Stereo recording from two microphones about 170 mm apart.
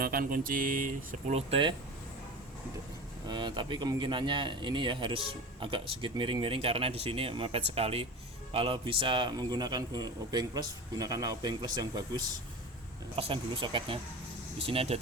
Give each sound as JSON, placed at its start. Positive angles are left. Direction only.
{"t": 0.0, "sound": "speech", "side_deg": -60}
{"t": 3.2, "sound": "speech", "side_deg": -25}